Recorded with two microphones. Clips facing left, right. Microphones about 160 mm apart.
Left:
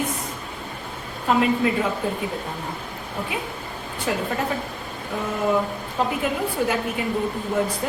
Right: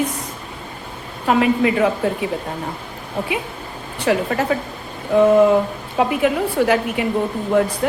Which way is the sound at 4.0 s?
90° right.